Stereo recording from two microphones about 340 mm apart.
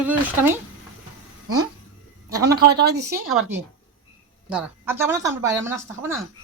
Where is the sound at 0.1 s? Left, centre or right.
Centre.